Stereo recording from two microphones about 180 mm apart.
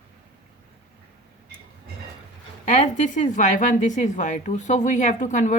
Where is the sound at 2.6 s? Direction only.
45° left (ahead or behind).